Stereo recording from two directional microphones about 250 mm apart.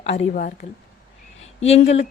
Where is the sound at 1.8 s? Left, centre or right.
Left.